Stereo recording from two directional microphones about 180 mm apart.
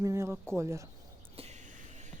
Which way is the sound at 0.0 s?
15° right (ahead or behind).